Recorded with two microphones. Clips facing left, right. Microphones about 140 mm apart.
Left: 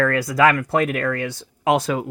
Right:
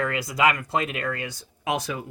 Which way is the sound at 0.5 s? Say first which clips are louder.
Left 7 dB; 60° left (ahead or behind).